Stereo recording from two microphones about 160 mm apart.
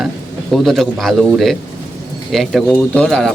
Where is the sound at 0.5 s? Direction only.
Centre (ahead or behind).